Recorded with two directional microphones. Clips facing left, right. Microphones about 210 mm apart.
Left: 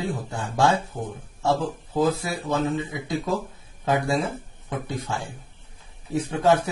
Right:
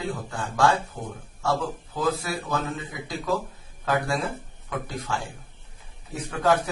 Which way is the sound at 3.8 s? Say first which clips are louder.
Left 3 dB; 25° left (ahead or behind).